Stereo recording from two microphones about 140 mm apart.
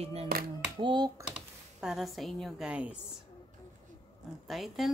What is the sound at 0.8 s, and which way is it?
Speech, 30° right (ahead or behind).